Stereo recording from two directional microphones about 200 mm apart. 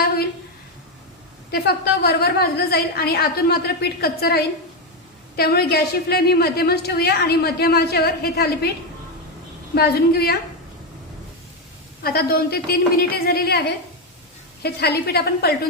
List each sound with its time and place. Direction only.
1.5 s a woman's voice: 55° left (ahead or behind)
5.4 s a woman's voice: 50° left (ahead or behind)
9.7 s a woman's voice: 50° left (ahead or behind)
12.0 s a woman's voice: 50° left (ahead or behind)